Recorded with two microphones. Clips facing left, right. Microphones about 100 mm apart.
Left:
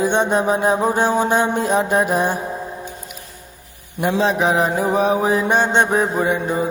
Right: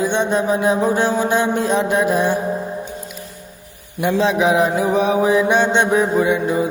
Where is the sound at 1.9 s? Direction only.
45° left (ahead or behind).